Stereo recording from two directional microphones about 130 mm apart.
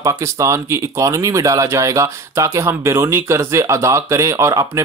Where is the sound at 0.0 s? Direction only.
20° right (ahead or behind).